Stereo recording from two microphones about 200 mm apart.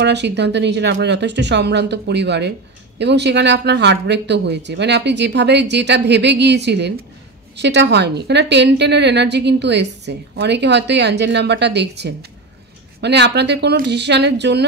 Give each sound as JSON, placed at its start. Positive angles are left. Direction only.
{"t": 0.0, "sound": "a woman's voice", "side_deg": -60}